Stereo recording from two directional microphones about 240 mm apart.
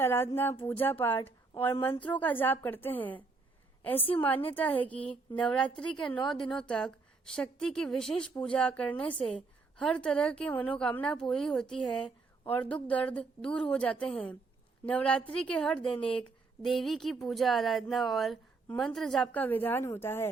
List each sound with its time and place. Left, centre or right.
0.0 s a woman's voice: centre
6.1 s a woman's voice: centre
6.4 s a woman's voice: centre